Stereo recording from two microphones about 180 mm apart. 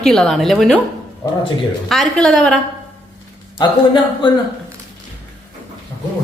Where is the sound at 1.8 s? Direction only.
Centre (ahead or behind).